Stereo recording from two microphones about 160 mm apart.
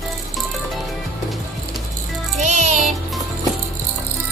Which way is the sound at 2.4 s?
50° right (ahead or behind).